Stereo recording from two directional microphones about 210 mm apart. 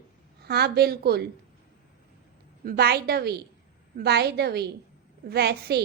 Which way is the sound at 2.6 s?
50° right (ahead or behind).